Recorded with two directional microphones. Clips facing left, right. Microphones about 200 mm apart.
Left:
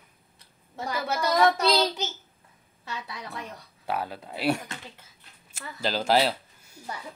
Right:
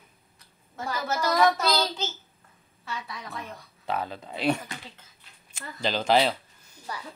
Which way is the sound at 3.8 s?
10° left (ahead or behind).